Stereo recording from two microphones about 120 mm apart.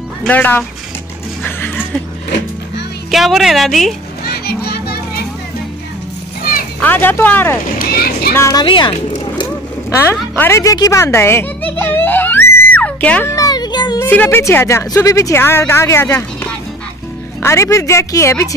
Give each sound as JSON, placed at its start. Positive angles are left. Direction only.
{"t": 0.3, "sound": "speech", "side_deg": 15}
{"t": 1.4, "sound": "a sound", "side_deg": 15}
{"t": 3.1, "sound": "a woman's voice", "side_deg": 0}
{"t": 6.8, "sound": "a woman's voice", "side_deg": 15}
{"t": 8.6, "sound": "speech", "side_deg": 40}
{"t": 9.8, "sound": "a woman's voice", "side_deg": 20}
{"t": 10.6, "sound": "music", "side_deg": 30}
{"t": 13.3, "sound": "a sound", "side_deg": 30}
{"t": 13.9, "sound": "a woman's voice", "side_deg": 15}